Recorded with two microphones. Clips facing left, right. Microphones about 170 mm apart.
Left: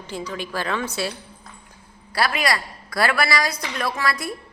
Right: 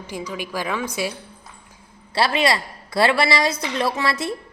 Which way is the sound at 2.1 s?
25° right (ahead or behind).